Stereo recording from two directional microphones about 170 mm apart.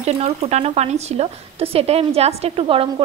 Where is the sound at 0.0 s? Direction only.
40° right (ahead or behind).